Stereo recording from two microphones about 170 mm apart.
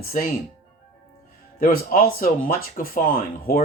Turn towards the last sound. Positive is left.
turn(degrees=55)  # may be behind; listen again after turning